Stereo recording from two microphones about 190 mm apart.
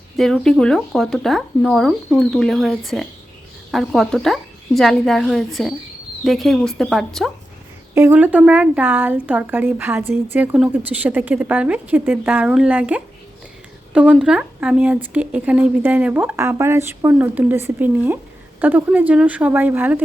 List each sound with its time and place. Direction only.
0.2 s speech: centre (ahead or behind)
7.9 s speech: 10° right (ahead or behind)